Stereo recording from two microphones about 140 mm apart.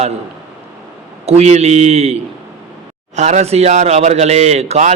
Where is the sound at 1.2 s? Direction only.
50° right (ahead or behind).